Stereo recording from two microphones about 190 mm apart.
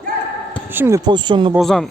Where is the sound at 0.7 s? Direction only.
10° right (ahead or behind).